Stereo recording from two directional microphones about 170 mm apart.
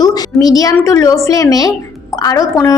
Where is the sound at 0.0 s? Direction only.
20° left (ahead or behind).